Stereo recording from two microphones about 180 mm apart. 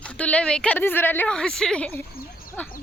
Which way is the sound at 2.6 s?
10° left (ahead or behind).